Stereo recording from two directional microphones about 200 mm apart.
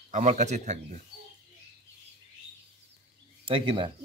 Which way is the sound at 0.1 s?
35° right (ahead or behind).